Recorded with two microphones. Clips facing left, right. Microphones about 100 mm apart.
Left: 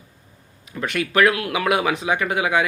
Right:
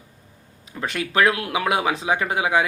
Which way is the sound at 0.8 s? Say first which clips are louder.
Left 2 dB; 25° right (ahead or behind).